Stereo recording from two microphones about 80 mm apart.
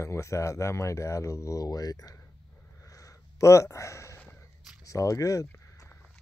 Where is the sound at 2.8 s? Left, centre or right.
Left.